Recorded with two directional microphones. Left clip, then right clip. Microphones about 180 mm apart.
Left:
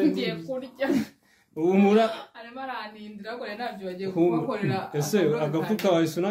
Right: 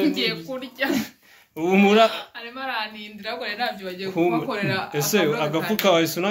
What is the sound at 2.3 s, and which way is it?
Speech, 20° left (ahead or behind).